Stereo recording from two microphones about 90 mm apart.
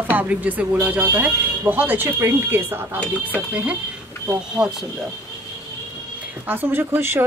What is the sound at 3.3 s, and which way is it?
Speech, 10° right (ahead or behind).